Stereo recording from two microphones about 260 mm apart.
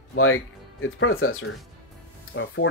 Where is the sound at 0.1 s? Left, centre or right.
Left.